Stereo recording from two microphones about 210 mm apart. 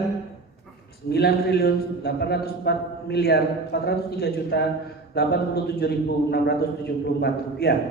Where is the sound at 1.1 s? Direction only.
50° left (ahead or behind).